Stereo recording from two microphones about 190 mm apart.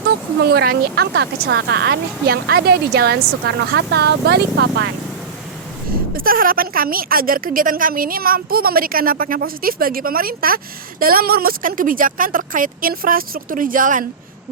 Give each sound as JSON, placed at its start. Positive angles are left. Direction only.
{"t": 0.4, "sound": "speech", "side_deg": -55}
{"t": 6.1, "sound": "a woman's voice", "side_deg": -50}